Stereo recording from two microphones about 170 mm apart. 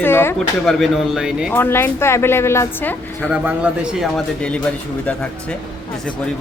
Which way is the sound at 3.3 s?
5° right (ahead or behind).